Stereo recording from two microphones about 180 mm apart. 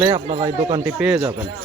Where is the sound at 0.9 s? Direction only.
5° right (ahead or behind).